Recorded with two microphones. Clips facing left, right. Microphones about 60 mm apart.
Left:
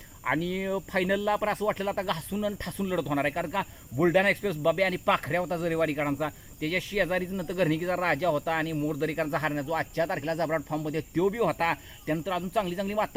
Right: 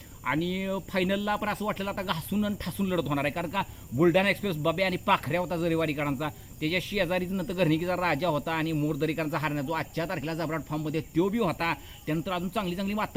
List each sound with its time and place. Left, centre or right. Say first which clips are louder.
0.3 s speech: left 1 dB; left